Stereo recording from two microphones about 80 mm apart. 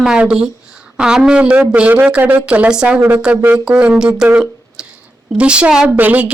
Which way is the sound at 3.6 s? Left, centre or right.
Centre.